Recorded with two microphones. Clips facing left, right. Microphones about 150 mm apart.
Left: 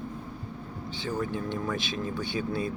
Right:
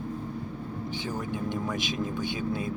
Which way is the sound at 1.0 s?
15° right (ahead or behind).